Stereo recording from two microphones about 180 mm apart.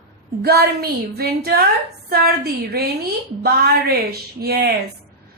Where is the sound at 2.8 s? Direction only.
65° right (ahead or behind).